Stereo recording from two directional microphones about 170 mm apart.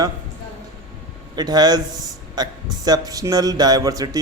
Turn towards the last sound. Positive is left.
turn(degrees=-20)  # may be behind; listen again after turning